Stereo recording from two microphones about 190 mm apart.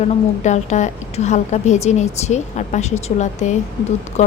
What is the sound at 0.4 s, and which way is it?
A woman's voice, 40° left (ahead or behind).